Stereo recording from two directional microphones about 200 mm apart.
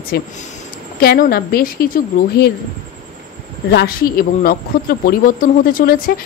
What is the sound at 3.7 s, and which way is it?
A woman's voice, 50° left (ahead or behind).